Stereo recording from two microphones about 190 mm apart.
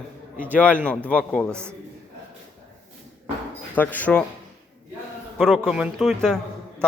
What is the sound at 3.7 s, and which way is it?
Speech, 10° left (ahead or behind).